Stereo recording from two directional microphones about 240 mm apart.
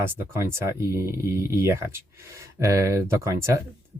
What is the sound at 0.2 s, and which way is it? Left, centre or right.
Speech, centre.